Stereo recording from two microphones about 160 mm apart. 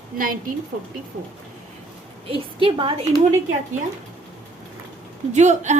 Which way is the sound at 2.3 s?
35° right (ahead or behind).